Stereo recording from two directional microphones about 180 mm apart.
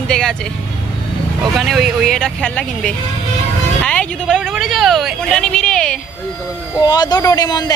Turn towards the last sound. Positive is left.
turn(degrees=20)  # may be behind; listen again after turning